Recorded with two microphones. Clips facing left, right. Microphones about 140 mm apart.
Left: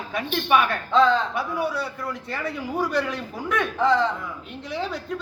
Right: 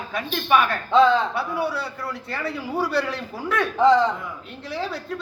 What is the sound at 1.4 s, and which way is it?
Speech, 15° left (ahead or behind).